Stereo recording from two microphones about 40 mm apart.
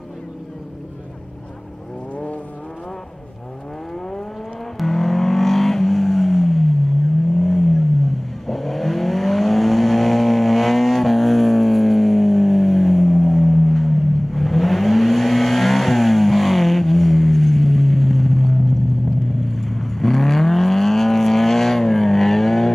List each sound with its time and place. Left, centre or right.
2.1 s vehicle: left
4.7 s vehicle: centre